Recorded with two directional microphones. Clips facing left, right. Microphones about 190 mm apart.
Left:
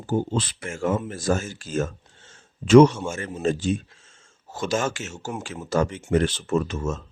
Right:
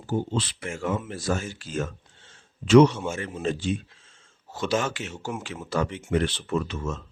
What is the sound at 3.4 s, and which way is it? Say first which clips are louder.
Speech: left 5 dB; 45° left (ahead or behind).